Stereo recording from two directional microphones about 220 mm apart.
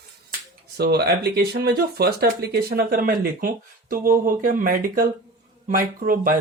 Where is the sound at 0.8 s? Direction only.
45° right (ahead or behind).